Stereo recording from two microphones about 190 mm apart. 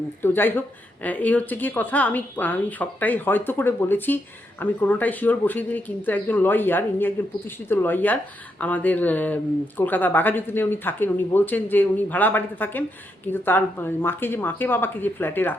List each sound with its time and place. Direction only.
0.2 s speech: 10° left (ahead or behind)